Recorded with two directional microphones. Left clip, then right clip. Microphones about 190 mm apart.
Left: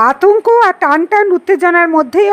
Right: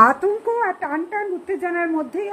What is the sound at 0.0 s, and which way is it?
Speech, 45° left (ahead or behind).